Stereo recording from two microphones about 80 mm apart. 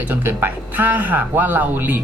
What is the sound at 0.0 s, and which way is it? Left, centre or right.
Speech, right.